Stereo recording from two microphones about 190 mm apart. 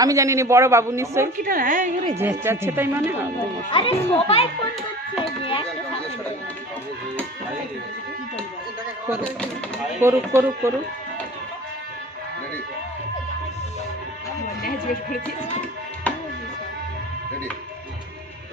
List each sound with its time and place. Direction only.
0.0 s a man's voice: 15° right (ahead or behind)
1.4 s a woman's voice: 45° right (ahead or behind)
2.0 s a man's voice: 15° right (ahead or behind)
3.7 s a child's voice: 25° left (ahead or behind)
5.2 s a sound: 30° left (ahead or behind)
9.2 s speech: 5° left (ahead or behind)
10.0 s a man's voice: 15° right (ahead or behind)
16.1 s music: 5° left (ahead or behind)